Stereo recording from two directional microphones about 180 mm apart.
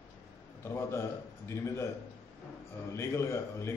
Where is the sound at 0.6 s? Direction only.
15° left (ahead or behind).